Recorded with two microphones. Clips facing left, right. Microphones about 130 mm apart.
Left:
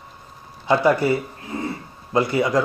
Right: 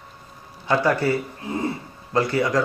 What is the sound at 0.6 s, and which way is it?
Speech, 15° left (ahead or behind).